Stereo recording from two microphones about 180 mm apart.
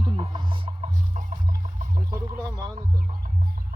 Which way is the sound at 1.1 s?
45° right (ahead or behind).